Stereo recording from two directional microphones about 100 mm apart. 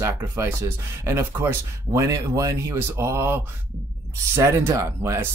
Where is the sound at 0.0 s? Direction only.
25° right (ahead or behind).